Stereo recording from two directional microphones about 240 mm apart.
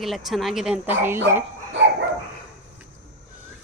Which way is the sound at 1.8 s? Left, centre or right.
Right.